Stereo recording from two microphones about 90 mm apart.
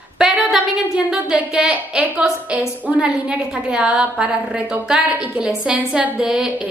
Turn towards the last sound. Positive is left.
turn(degrees=-10)  # may be behind; listen again after turning